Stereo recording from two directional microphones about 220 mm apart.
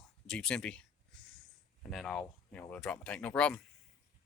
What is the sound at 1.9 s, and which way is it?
Speech, centre (ahead or behind).